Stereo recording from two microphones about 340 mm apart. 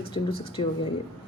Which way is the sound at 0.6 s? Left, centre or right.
Centre.